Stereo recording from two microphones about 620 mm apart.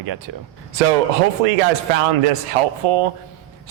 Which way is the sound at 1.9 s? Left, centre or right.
Right.